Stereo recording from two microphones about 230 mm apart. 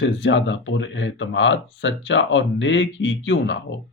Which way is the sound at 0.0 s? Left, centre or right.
Left.